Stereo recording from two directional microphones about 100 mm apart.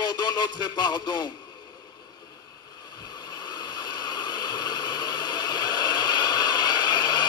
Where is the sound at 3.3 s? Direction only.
45° left (ahead or behind).